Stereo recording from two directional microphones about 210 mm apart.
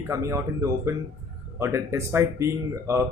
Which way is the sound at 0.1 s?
15° right (ahead or behind).